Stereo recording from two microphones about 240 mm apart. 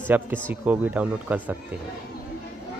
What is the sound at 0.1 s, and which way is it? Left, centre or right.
Speech, centre.